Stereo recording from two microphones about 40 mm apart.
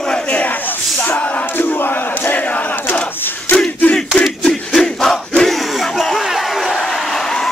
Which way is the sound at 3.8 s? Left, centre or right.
Left.